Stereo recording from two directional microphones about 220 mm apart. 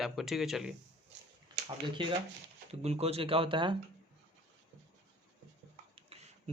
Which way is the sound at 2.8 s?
30° right (ahead or behind).